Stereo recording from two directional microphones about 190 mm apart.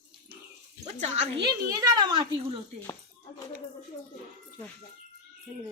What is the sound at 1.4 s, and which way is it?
A child's voice, 20° right (ahead or behind).